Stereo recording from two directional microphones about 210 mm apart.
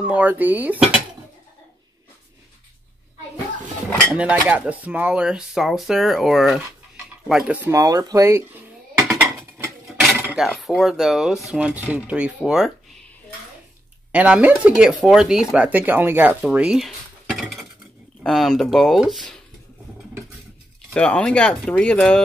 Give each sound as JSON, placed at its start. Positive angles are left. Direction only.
{"t": 0.0, "sound": "dishes", "side_deg": -5}
{"t": 4.1, "sound": "speech", "side_deg": -5}
{"t": 7.2, "sound": "a sound", "side_deg": -5}
{"t": 9.8, "sound": "speech", "side_deg": 0}
{"t": 14.1, "sound": "dishes", "side_deg": -5}
{"t": 15.0, "sound": "speech", "side_deg": 0}
{"t": 20.9, "sound": "speech", "side_deg": 5}